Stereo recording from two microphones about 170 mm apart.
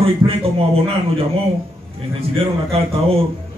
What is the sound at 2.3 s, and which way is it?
Speech, 35° right (ahead or behind).